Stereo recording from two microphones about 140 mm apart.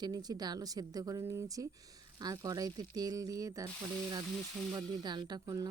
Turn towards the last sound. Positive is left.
turn(degrees=-30)  # may be behind; listen again after turning